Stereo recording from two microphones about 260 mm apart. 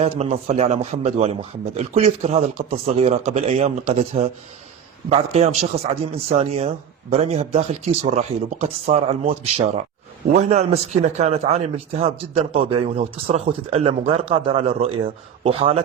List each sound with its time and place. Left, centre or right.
0.0 s speech: right